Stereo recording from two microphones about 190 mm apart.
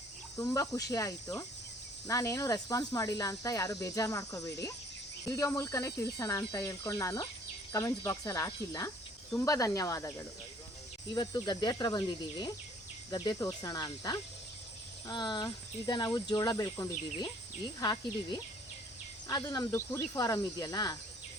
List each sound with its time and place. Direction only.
0.3 s speech: 15° left (ahead or behind)